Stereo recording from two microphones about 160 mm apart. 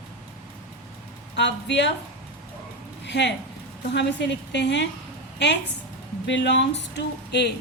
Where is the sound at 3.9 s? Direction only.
90° left.